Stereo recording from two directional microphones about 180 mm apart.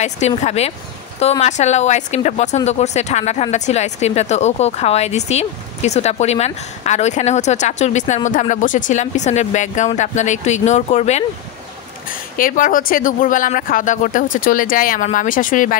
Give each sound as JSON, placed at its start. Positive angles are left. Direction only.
{"t": 0.4, "sound": "speech", "side_deg": 35}
{"t": 12.1, "sound": "speech", "side_deg": 50}